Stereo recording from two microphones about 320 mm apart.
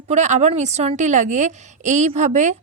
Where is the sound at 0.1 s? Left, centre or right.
Right.